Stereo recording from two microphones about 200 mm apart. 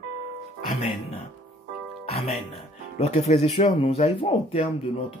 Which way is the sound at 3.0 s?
30° left (ahead or behind).